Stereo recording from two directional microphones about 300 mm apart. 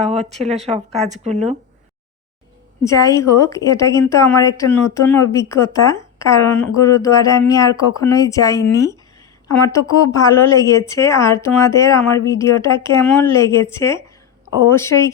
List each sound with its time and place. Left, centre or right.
0.0 s speech: right
2.8 s a woman's voice: centre